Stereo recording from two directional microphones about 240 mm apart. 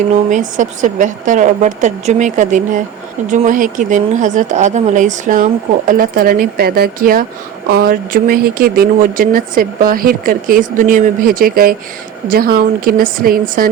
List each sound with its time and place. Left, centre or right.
0.3 s speech: right